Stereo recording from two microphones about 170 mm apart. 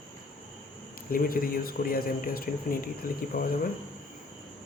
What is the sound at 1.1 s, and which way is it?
Speech, 60° left (ahead or behind).